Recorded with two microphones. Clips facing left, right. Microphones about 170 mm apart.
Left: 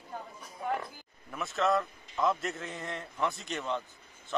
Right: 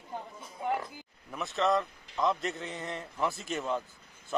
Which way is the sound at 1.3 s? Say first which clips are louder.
Even; centre (ahead or behind).